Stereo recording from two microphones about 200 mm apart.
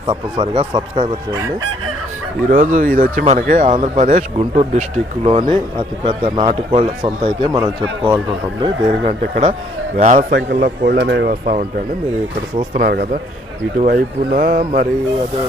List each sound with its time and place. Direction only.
0.3 s speech: 30° right (ahead or behind)
2.5 s speech: 40° right (ahead or behind)
7.0 s speech: 20° right (ahead or behind)
8.6 s speech: 30° right (ahead or behind)
10.3 s speech: 55° right (ahead or behind)
12.7 s speech: 45° right (ahead or behind)